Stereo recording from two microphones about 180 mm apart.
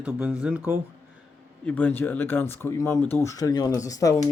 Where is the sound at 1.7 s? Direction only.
10° left (ahead or behind).